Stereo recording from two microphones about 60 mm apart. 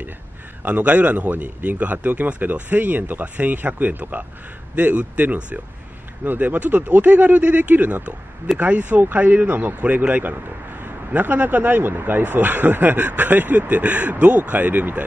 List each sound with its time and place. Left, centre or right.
0.7 s speech: right